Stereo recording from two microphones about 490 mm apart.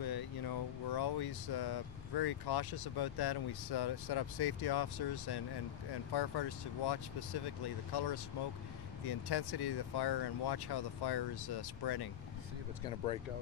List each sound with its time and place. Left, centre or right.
0.0 s speech: left